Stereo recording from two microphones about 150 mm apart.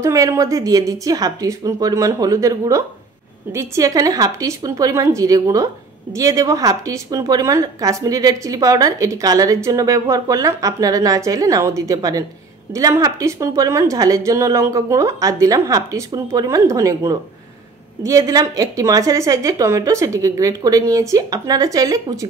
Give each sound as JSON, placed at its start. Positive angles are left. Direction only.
{"t": 0.0, "sound": "a woman's voice", "side_deg": -20}